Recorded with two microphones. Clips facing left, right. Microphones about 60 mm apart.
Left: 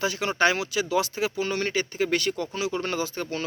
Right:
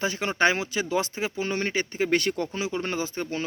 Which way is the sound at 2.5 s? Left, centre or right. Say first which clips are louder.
Left 1 dB; right.